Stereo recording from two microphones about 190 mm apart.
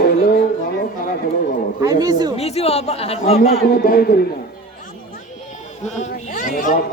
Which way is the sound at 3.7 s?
50° left (ahead or behind).